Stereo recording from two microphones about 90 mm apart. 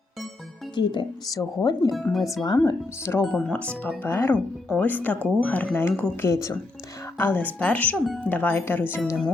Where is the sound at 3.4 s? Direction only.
15° left (ahead or behind).